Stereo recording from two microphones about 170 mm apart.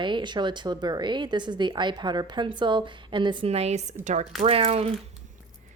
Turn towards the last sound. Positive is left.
turn(degrees=-35)  # may be behind; listen again after turning